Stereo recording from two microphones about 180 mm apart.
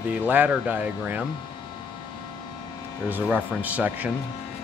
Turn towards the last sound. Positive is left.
turn(degrees=-10)  # may be behind; listen again after turning